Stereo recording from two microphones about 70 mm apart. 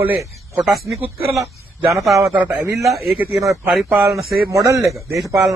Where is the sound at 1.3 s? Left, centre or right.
Right.